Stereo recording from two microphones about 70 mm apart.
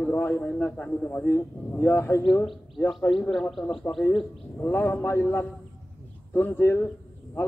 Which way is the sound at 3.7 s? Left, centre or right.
Centre.